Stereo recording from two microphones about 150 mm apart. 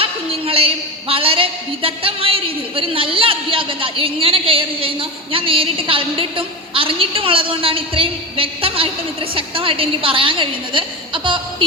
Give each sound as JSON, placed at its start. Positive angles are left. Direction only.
{"t": 0.0, "sound": "a woman's voice", "side_deg": -40}